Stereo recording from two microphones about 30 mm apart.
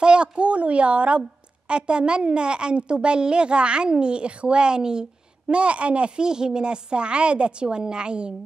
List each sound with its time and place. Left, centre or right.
0.0 s a woman's voice: right
1.7 s a woman's voice: right
5.5 s a woman's voice: right
6.1 s a woman's voice: right